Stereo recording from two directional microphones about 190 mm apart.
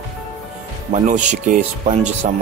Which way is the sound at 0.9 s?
40° right (ahead or behind).